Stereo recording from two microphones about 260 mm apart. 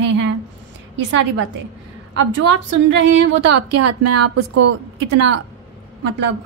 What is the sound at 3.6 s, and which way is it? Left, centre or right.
Speech, right.